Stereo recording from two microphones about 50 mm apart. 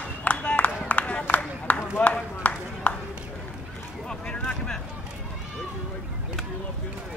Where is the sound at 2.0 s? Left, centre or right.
Left.